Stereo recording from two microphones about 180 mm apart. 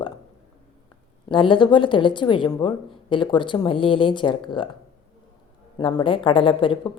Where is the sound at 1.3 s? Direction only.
25° left (ahead or behind).